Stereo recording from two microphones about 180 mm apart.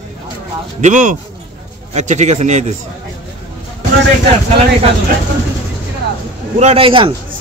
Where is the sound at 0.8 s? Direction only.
45° right (ahead or behind).